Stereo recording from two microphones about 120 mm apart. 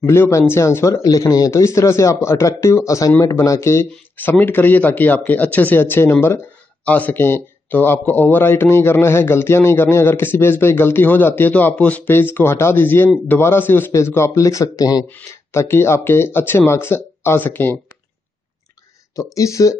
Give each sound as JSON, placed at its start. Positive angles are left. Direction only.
{"t": 0.0, "sound": "speech", "side_deg": 20}
{"t": 3.9, "sound": "a man's voice", "side_deg": 15}
{"t": 19.3, "sound": "speech", "side_deg": 25}